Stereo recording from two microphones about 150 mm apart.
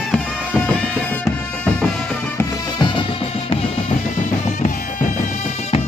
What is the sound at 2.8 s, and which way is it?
Music, 35° left (ahead or behind).